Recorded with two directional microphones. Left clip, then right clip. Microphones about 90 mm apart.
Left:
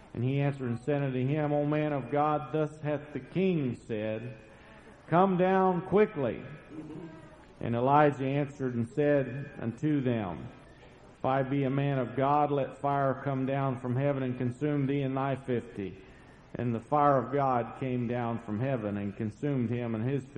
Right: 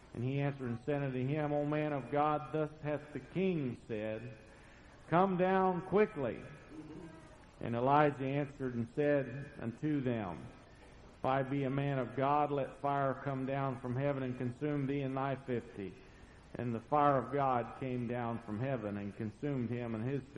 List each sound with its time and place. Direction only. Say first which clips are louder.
0.2 s a man's voice: left 6 dB; 25° left (ahead or behind)
3.0 s a man's voice: left 6 dB; 40° left (ahead or behind)
3.5 s a man's voice: left 6 dB; 25° left (ahead or behind)
6.7 s music: left 7 dB; centre (ahead or behind)
7.6 s a man's voice: left 5 dB; 25° left (ahead or behind)
8.9 s a man's voice: left 5 dB; 30° left (ahead or behind)
9.9 s a man's voice: left 6 dB; 25° left (ahead or behind)
14.3 s a man's voice: left 6 dB; 30° left (ahead or behind)
17.0 s a man's voice: left 6 dB; 20° left (ahead or behind)